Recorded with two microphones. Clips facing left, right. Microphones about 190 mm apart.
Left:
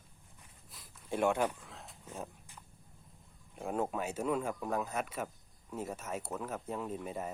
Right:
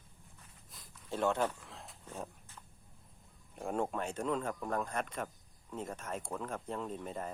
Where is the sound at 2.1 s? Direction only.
10° left (ahead or behind).